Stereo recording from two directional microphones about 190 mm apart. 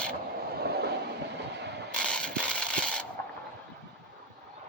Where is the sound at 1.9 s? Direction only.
5° left (ahead or behind).